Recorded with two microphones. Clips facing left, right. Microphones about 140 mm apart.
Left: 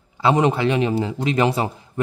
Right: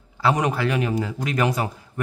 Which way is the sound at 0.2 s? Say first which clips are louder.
Left 4 dB; 25° left (ahead or behind).